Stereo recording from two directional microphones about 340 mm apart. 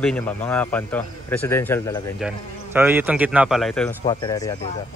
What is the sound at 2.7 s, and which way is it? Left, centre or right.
Speech, centre.